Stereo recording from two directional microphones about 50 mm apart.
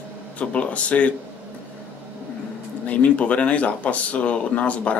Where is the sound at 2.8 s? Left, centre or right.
Left.